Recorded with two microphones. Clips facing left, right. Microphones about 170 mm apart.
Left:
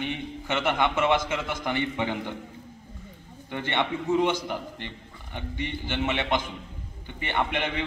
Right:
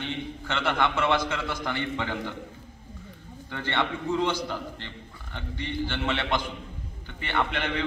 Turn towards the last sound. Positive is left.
turn(degrees=15)  # may be behind; listen again after turning